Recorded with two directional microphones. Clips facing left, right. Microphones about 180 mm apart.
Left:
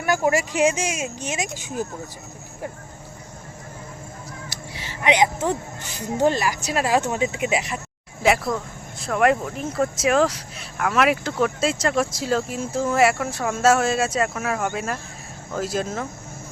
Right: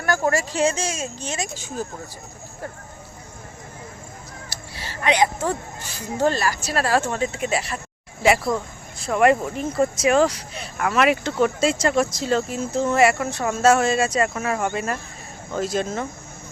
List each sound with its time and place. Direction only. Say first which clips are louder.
0.0 s speech: left 1 dB; 15° left (ahead or behind)
4.4 s a sound: left 1 dB; 15° left (ahead or behind)
6.1 s speech: left 1 dB; 15° left (ahead or behind)
8.2 s speech: right 1 dB; centre (ahead or behind)